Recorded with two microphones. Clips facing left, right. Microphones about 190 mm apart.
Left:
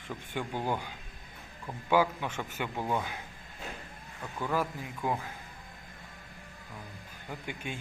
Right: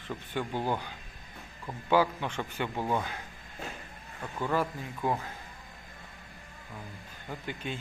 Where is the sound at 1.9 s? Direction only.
10° left (ahead or behind).